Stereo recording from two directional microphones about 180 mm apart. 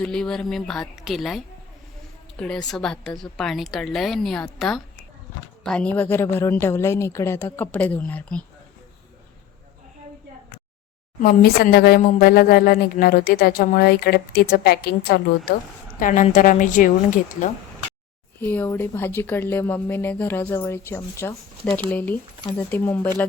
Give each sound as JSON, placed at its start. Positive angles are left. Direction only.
{"t": 0.0, "sound": "a woman's voice", "side_deg": 5}
{"t": 2.4, "sound": "a woman's voice", "side_deg": 5}
{"t": 11.2, "sound": "speech", "side_deg": 55}
{"t": 16.0, "sound": "a woman's voice", "side_deg": 45}
{"t": 18.3, "sound": "speech", "side_deg": 10}